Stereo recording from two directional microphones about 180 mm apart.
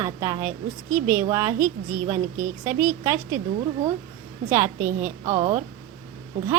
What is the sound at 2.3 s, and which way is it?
Speech, 45° right (ahead or behind).